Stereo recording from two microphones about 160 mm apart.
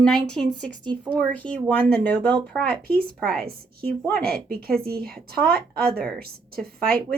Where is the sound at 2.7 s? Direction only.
70° right (ahead or behind).